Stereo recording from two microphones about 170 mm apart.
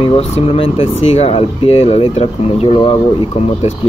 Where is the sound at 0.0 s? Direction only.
35° left (ahead or behind).